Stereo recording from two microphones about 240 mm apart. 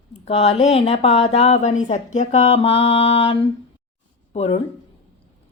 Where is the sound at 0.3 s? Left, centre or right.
Left.